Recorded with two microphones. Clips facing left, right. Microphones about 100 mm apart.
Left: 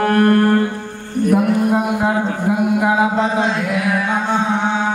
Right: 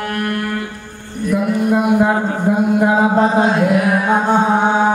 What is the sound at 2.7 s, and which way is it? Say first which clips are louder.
Music: right 2 dB; 40° right (ahead or behind).